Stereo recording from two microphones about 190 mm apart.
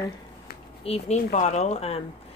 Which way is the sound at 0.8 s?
30° left (ahead or behind).